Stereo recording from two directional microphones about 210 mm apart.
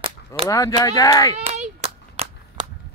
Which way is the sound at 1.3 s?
30° right (ahead or behind).